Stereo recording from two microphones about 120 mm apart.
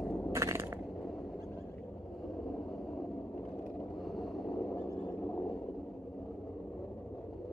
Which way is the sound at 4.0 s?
Centre (ahead or behind).